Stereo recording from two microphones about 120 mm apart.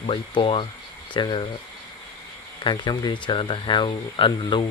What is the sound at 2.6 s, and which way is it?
Speech, 40° left (ahead or behind).